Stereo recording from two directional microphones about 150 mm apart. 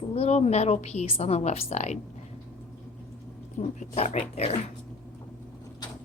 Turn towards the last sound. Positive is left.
turn(degrees=45)  # may be behind; listen again after turning